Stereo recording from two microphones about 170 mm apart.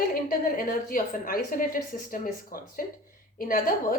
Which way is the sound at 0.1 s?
55° left (ahead or behind).